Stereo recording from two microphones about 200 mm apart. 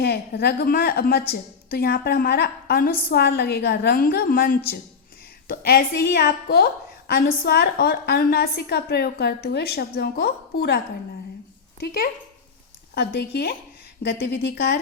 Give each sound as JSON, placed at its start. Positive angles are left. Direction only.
{"t": 0.0, "sound": "a woman's voice", "side_deg": 55}
{"t": 11.8, "sound": "a woman's voice", "side_deg": 50}